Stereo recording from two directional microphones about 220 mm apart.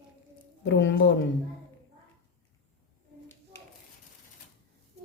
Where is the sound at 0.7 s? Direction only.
50° left (ahead or behind).